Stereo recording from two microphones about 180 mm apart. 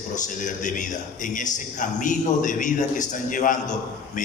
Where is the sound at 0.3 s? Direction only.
45° left (ahead or behind).